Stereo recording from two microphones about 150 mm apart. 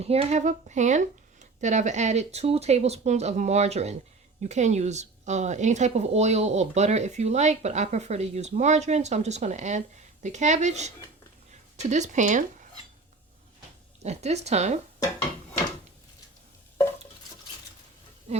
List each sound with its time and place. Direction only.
0.0 s speech: 45° right (ahead or behind)
14.0 s speech: 45° right (ahead or behind)